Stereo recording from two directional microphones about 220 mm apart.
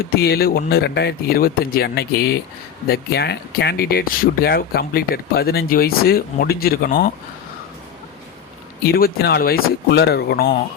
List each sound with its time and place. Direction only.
0.0 s speech: 45° left (ahead or behind)
8.9 s speech: 45° left (ahead or behind)